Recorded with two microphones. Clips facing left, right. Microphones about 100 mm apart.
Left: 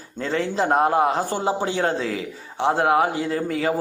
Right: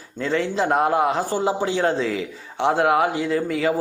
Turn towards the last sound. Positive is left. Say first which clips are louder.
# right 2 dB
turn(degrees=40)  # may be behind; listen again after turning